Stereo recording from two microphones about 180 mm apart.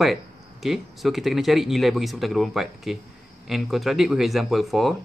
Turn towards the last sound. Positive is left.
turn(degrees=0)  # may be behind; listen again after turning